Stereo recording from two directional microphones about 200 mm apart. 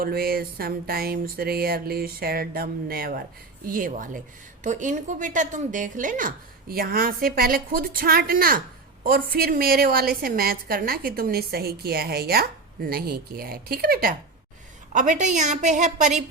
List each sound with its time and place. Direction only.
0.0 s a woman's voice: 50° right (ahead or behind)
14.9 s a woman's voice: 40° right (ahead or behind)